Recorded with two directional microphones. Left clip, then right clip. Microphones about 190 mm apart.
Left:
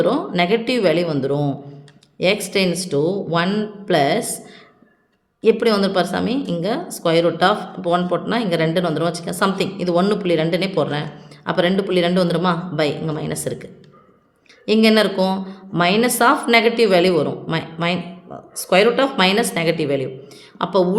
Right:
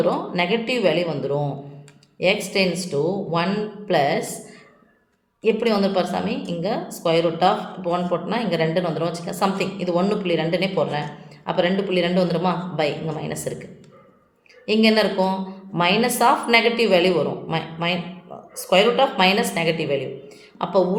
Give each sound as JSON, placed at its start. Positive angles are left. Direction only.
{"t": 0.0, "sound": "speech", "side_deg": 45}
{"t": 5.4, "sound": "speech", "side_deg": 45}
{"t": 14.7, "sound": "speech", "side_deg": 45}